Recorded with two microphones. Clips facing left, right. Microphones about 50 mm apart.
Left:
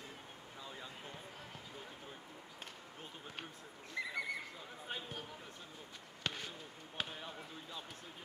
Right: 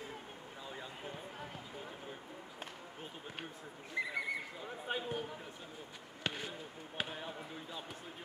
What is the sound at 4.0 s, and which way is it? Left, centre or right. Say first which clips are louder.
Neigh: right 4 dB; right.